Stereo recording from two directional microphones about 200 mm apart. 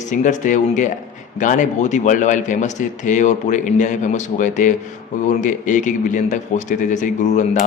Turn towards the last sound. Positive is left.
turn(degrees=40)  # may be behind; listen again after turning